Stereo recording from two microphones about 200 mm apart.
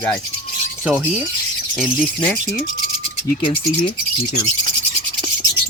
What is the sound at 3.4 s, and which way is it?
Speech, 25° left (ahead or behind).